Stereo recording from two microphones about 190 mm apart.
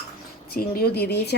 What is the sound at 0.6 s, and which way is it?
Speech, 55° left (ahead or behind).